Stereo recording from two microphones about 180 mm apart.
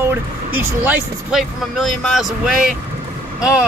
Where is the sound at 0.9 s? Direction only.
Centre (ahead or behind).